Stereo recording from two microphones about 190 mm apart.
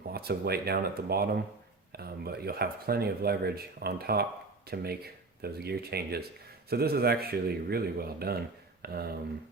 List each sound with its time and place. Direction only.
0.1 s speech: 55° right (ahead or behind)